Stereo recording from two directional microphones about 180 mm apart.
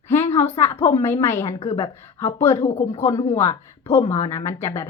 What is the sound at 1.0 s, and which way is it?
A woman's voice, 15° left (ahead or behind).